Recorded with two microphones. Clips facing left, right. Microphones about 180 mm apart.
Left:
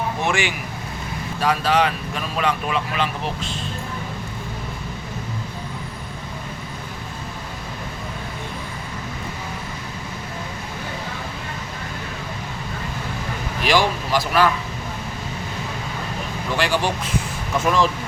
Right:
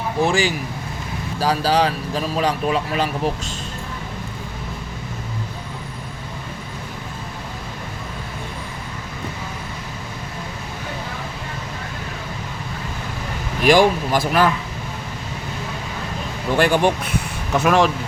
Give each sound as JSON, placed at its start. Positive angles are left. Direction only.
{"t": 0.2, "sound": "speech", "side_deg": -35}
{"t": 13.7, "sound": "speech", "side_deg": -50}
{"t": 16.6, "sound": "speech", "side_deg": -55}
{"t": 17.6, "sound": "speech", "side_deg": -70}